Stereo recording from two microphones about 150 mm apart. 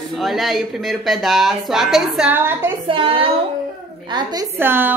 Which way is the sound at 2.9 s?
35° right (ahead or behind).